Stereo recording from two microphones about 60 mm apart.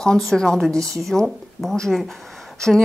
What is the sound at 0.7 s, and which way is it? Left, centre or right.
Speech, right.